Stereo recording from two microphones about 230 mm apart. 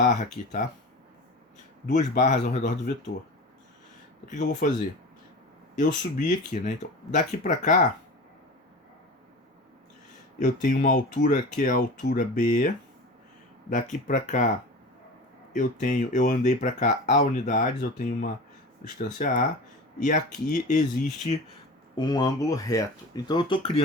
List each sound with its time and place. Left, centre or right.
0.0 s speech: left
2.1 s speech: left
4.3 s speech: left
5.8 s speech: left
10.4 s speech: left
15.5 s speech: left
21.9 s speech: centre